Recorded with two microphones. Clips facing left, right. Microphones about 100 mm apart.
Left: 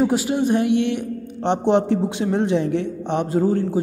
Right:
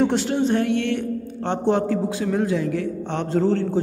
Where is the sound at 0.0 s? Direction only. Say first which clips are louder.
Left 1 dB; 5° left (ahead or behind).